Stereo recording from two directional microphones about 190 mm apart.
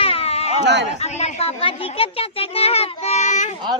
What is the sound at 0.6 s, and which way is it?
Speech, 65° right (ahead or behind).